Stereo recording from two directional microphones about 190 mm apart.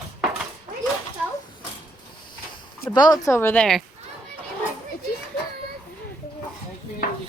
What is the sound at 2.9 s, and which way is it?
Speech, 20° left (ahead or behind).